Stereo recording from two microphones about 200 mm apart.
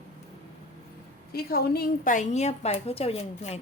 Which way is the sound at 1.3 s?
50° left (ahead or behind).